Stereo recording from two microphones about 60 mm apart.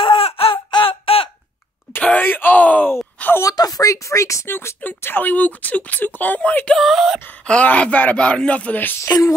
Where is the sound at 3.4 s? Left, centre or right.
Left.